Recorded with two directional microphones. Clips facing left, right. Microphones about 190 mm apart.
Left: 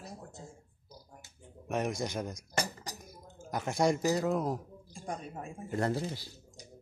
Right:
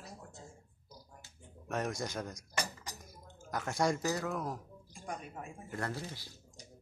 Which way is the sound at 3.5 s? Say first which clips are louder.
Left 4 dB; 20° left (ahead or behind).